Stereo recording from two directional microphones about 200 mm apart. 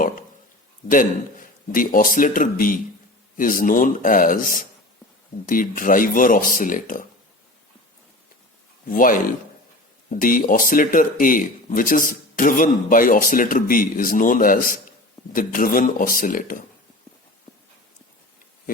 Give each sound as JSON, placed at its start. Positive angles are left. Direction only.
{"t": 0.9, "sound": "speech", "side_deg": 40}
{"t": 8.9, "sound": "speech", "side_deg": 45}